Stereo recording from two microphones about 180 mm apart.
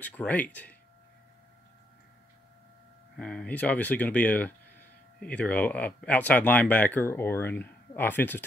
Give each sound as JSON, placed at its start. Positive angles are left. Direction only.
{"t": 0.0, "sound": "speech", "side_deg": 10}
{"t": 3.2, "sound": "speech", "side_deg": 5}